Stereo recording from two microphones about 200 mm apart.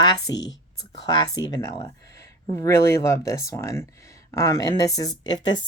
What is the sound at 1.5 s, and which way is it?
Speech, 15° left (ahead or behind).